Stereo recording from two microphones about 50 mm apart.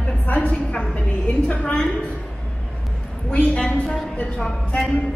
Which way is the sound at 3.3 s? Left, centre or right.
Left.